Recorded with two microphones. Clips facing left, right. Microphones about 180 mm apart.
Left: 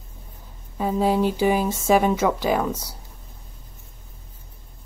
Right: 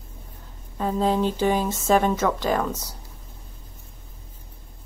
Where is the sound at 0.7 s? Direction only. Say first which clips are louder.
Left 2 dB; 10° left (ahead or behind).